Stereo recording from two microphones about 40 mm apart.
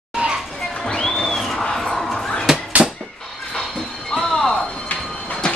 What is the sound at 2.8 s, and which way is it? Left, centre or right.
Fowl, right.